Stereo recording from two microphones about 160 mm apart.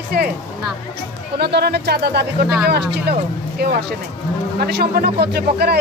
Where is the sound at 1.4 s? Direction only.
90° right.